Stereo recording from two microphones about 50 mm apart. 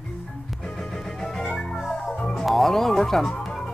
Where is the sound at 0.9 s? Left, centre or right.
Centre.